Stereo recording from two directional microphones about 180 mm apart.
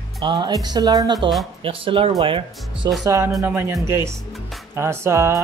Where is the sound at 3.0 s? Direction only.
15° right (ahead or behind).